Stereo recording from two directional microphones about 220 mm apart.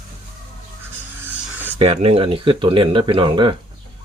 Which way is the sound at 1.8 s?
30° right (ahead or behind).